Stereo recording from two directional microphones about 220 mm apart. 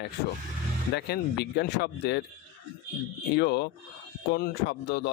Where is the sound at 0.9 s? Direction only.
50° left (ahead or behind).